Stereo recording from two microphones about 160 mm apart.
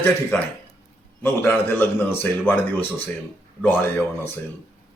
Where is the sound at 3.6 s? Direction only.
10° left (ahead or behind).